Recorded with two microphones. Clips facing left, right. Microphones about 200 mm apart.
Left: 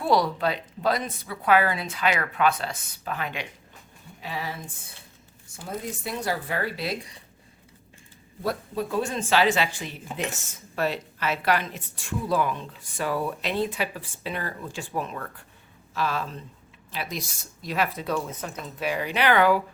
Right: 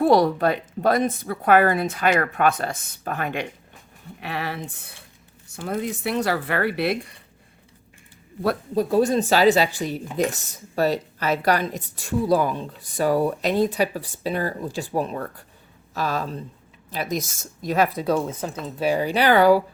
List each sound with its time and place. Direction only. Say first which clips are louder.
0.0 s speech: right 6 dB; 50° right (ahead or behind)
4.2 s a woman's voice: right 4 dB; 65° right (ahead or behind)
8.7 s speech: right 11 dB; 40° right (ahead or behind)